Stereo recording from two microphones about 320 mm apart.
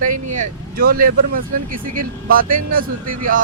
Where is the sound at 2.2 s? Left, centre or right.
Right.